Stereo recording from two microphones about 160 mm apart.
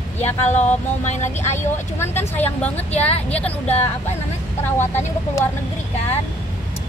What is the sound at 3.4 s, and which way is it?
Speech, 40° left (ahead or behind).